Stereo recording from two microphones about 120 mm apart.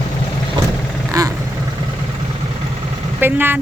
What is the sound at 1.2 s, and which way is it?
Vehicle, 30° right (ahead or behind).